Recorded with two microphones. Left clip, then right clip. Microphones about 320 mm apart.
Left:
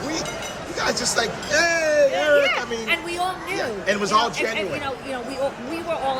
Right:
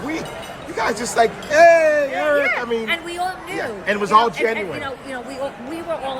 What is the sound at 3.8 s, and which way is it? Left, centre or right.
Speech, right.